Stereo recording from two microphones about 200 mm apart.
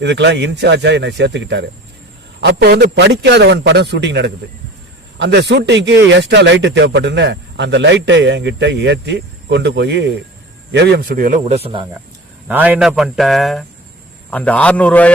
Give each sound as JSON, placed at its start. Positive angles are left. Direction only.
{"t": 0.0, "sound": "a man's voice", "side_deg": -60}
{"t": 12.5, "sound": "a man's voice", "side_deg": -10}